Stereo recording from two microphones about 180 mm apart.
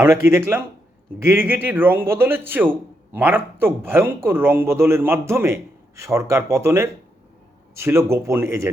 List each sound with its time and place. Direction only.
0.0 s speech: 15° right (ahead or behind)